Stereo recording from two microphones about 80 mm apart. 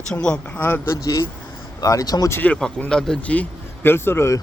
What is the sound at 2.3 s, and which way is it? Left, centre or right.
Speech, left.